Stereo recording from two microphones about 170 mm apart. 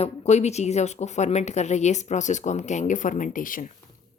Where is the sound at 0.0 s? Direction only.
40° left (ahead or behind).